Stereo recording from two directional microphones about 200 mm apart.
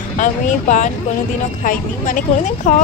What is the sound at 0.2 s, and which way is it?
Speech, 40° left (ahead or behind).